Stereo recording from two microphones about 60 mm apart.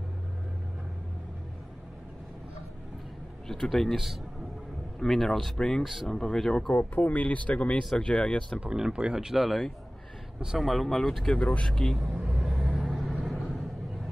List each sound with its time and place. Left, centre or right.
3.4 s speech: centre
3.9 s speech: centre
6.7 s speech: left
8.5 s speech: centre
10.6 s speech: centre
11.3 s speech: left
11.6 s speech: centre
12.0 s vehicle: centre
12.8 s vehicle: centre